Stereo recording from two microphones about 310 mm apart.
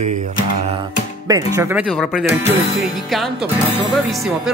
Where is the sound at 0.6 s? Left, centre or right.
Centre.